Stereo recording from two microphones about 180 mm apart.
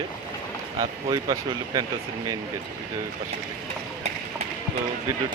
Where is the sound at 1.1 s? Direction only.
20° right (ahead or behind).